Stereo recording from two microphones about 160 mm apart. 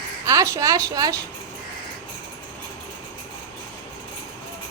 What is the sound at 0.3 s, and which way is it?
Speech, 20° right (ahead or behind).